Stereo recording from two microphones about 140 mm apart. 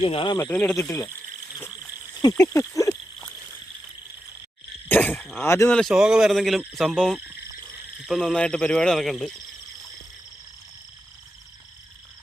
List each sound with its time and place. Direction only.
0.0 s speech: 40° left (ahead or behind)
0.3 s speech: 15° left (ahead or behind)
2.4 s a sound: 20° left (ahead or behind)
4.9 s throat clearing: 15° left (ahead or behind)
5.4 s speech: 15° left (ahead or behind)
5.7 s speech: centre (ahead or behind)